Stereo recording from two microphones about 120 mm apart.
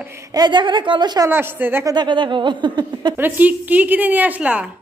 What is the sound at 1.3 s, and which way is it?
Speech, 20° right (ahead or behind).